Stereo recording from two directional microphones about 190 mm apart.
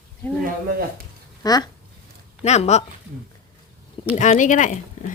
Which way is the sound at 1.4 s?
20° left (ahead or behind).